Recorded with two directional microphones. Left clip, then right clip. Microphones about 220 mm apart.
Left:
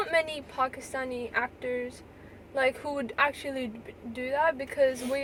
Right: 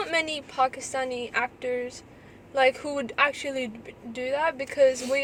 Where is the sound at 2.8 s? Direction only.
10° right (ahead or behind).